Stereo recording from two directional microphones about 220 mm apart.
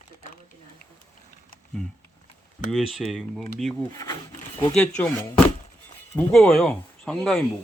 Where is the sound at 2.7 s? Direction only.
Centre (ahead or behind).